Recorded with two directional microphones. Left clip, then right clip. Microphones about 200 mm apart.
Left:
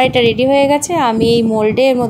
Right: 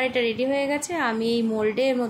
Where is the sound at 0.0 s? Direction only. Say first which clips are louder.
Left 12 dB; 35° left (ahead or behind).